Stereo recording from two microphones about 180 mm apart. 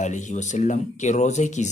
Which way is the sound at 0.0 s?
45° left (ahead or behind).